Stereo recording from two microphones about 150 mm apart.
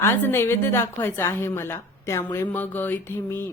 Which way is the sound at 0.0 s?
15° left (ahead or behind).